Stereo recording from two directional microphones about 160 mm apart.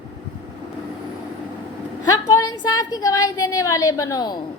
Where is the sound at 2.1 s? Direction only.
25° left (ahead or behind).